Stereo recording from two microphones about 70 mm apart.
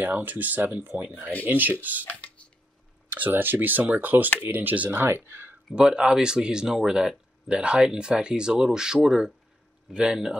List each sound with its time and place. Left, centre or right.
0.0 s speech: right
2.0 s a sound: centre
3.2 s speech: right
5.0 s speech: right
5.7 s speech: centre